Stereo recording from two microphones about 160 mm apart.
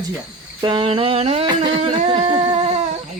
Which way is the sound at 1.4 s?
25° right (ahead or behind).